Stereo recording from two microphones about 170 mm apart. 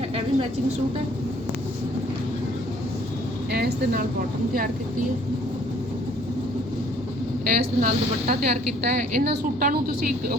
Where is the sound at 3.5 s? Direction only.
70° right (ahead or behind).